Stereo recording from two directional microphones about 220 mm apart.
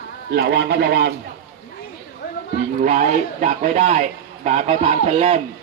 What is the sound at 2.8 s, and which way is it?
Speech, 35° right (ahead or behind).